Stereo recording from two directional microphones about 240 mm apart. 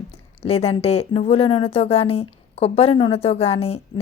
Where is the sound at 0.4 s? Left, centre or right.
Left.